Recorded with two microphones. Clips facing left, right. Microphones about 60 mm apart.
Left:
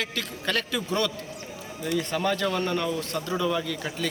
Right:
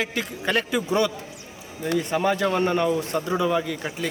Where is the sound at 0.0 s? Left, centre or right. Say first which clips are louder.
Right 4 dB; right.